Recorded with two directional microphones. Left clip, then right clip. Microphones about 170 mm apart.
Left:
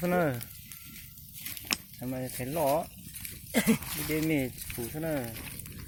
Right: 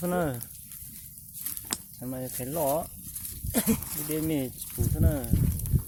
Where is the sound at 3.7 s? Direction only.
20° left (ahead or behind).